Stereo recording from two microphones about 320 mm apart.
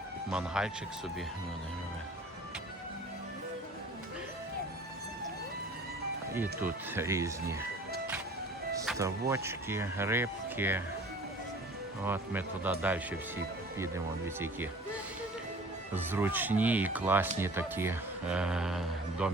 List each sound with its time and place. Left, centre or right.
0.3 s speech: centre
6.3 s speech: centre
8.9 s music: centre
9.3 s speech: centre
12.0 s speech: centre
16.0 s speech: centre